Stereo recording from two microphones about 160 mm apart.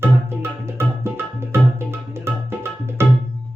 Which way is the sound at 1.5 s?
15° right (ahead or behind).